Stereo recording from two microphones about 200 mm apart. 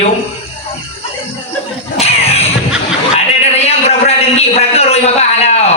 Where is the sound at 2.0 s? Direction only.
30° left (ahead or behind).